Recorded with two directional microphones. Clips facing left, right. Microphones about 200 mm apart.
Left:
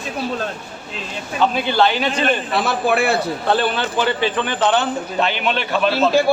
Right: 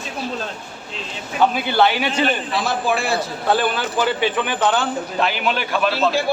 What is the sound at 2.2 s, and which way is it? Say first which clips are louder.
Speech: left 1 dB; 55° left (ahead or behind).